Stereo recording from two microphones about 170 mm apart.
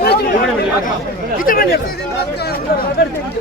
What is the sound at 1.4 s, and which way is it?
Speech, 55° left (ahead or behind).